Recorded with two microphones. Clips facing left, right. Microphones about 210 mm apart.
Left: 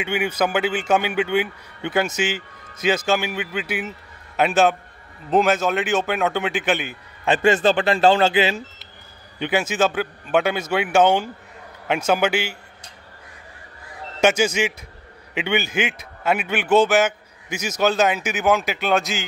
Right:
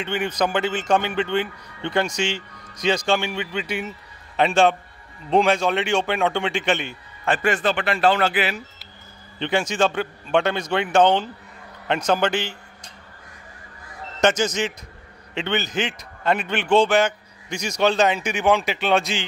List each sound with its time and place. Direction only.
0.0 s a man's voice: 10° left (ahead or behind)
7.2 s speech: 25° left (ahead or behind)
9.4 s a man's voice: 5° left (ahead or behind)
14.2 s a man's voice: 10° left (ahead or behind)